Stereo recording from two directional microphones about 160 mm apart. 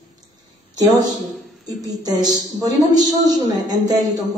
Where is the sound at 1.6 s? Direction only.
25° right (ahead or behind).